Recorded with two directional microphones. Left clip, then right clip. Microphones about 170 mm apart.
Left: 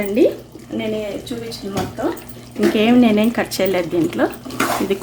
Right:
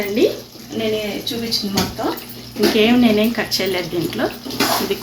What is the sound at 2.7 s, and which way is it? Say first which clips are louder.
Speech: even; 85° left.